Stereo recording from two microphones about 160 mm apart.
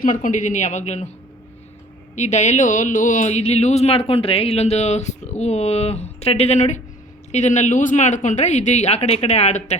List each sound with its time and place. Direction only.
0.0 s speech: 55° left (ahead or behind)
2.1 s speech: 45° left (ahead or behind)